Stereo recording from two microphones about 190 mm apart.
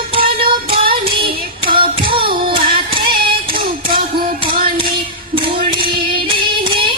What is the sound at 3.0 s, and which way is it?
Child singing, 50° right (ahead or behind).